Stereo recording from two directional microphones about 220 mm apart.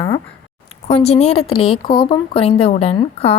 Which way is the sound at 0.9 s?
30° left (ahead or behind).